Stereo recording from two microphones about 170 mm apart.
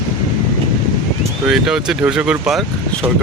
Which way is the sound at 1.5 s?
5° right (ahead or behind).